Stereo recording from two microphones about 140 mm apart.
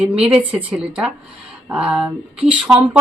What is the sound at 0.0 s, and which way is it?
Speech, 5° right (ahead or behind).